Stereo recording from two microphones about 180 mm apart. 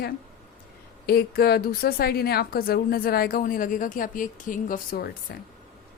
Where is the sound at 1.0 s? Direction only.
60° left (ahead or behind).